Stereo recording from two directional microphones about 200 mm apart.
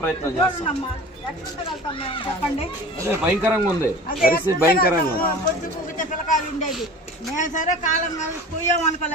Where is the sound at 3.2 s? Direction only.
5° right (ahead or behind).